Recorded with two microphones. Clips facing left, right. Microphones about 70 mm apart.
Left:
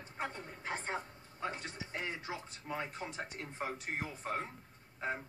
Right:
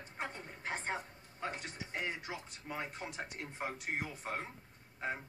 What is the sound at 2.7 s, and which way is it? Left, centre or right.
Speech, centre.